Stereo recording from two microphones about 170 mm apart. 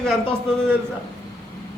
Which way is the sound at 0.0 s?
5° left (ahead or behind).